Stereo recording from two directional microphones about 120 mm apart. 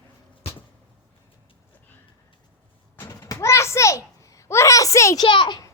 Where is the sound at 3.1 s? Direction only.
30° left (ahead or behind).